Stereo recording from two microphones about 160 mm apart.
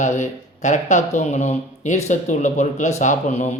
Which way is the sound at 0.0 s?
50° left (ahead or behind).